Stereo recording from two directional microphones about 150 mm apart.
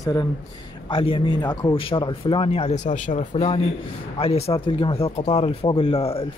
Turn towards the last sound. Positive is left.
turn(degrees=40)  # may be behind; listen again after turning